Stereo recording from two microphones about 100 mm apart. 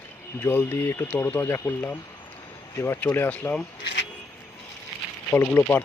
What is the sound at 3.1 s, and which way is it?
Speech, 20° left (ahead or behind).